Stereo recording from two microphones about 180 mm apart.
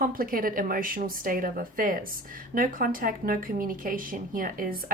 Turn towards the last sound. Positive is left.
turn(degrees=-50)  # may be behind; listen again after turning